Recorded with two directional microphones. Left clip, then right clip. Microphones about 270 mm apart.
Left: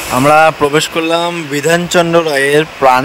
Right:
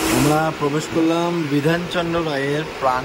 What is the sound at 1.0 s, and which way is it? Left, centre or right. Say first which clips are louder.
Speech: left 6 dB; left.